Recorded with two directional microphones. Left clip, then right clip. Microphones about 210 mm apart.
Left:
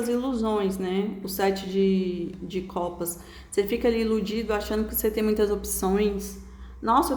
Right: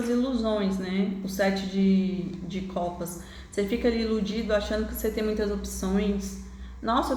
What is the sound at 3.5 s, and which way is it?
A woman's voice, 55° left (ahead or behind).